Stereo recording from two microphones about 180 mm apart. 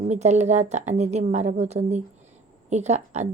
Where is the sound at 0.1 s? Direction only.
40° right (ahead or behind).